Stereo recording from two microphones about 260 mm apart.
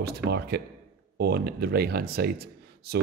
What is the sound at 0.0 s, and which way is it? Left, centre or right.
A man's voice, right.